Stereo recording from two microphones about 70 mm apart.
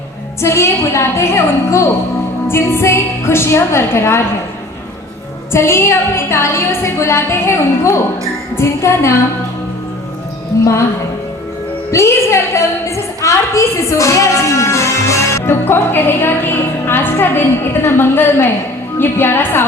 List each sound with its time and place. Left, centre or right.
0.4 s a woman's voice: left
5.5 s a woman's voice: left
10.5 s speech: left
11.9 s a woman's voice: left
15.6 s a woman's voice: left